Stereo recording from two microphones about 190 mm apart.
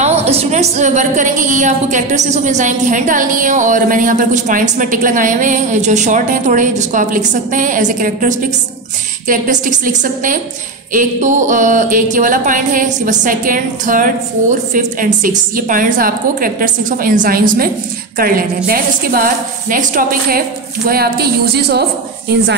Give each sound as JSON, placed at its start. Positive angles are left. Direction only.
{"t": 0.0, "sound": "a woman's voice", "side_deg": -35}
{"t": 10.9, "sound": "music", "side_deg": -40}
{"t": 20.9, "sound": "speech", "side_deg": -55}